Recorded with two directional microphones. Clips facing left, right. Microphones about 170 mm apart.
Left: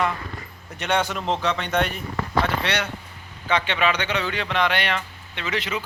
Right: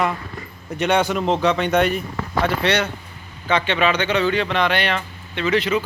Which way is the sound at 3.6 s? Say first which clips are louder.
Right 4 dB; 15° left (ahead or behind).